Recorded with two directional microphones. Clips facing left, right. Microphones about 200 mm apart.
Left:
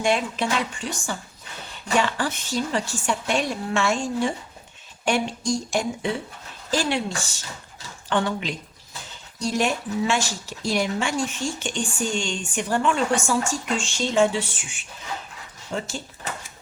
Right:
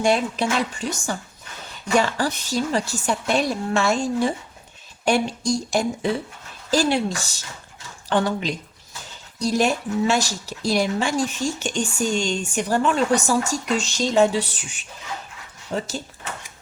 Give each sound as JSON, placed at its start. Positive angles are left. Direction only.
{"t": 0.0, "sound": "speech", "side_deg": -40}